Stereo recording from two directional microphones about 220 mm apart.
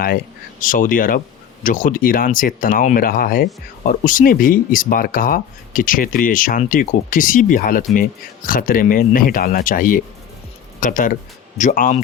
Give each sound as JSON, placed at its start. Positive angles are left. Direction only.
{"t": 0.6, "sound": "speech", "side_deg": 40}